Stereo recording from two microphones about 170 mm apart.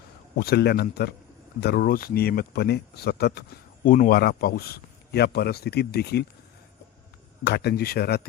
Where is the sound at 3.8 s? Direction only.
50° left (ahead or behind); by 6.2 s 70° left (ahead or behind).